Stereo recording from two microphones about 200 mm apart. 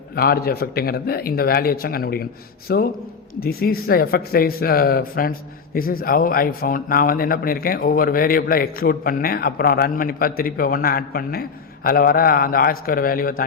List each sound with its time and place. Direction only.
0.2 s speech: 50° left (ahead or behind)